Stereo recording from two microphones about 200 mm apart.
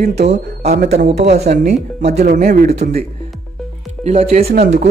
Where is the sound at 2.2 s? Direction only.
45° right (ahead or behind).